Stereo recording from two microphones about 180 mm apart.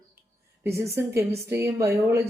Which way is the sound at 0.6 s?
15° right (ahead or behind).